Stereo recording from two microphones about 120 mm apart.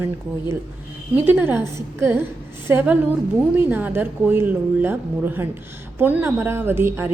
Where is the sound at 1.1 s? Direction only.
15° right (ahead or behind).